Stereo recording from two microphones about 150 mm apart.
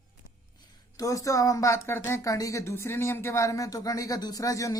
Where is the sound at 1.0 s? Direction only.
20° left (ahead or behind).